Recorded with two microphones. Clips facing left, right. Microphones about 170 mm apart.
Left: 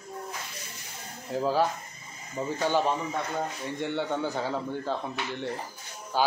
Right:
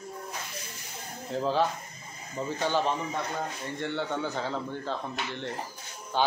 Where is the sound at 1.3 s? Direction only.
5° left (ahead or behind).